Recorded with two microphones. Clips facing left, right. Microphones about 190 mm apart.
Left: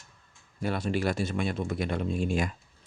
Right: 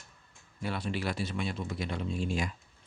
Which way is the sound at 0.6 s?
45° left (ahead or behind).